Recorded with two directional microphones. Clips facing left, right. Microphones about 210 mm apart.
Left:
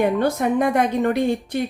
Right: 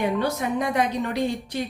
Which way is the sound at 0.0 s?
50° left (ahead or behind).